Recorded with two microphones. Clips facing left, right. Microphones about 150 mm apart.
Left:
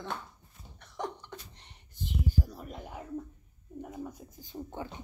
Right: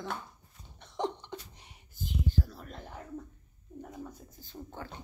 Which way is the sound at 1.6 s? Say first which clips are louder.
Left 1 dB; 10° right (ahead or behind).